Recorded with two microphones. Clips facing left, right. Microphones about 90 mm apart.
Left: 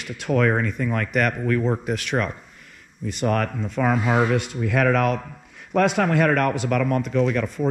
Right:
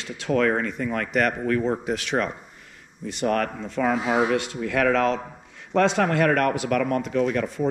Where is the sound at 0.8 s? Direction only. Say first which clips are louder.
Left 2 dB; 40° right (ahead or behind).